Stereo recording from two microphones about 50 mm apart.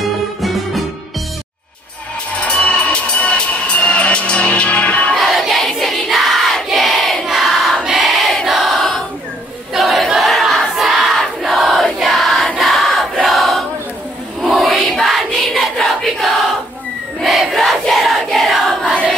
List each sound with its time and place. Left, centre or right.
0.0 s music: centre
2.3 s music: left
5.1 s crowd: centre
7.8 s choir: centre
9.8 s crowd: centre
13.1 s choir: centre
14.4 s a sound: centre
18.7 s choir: centre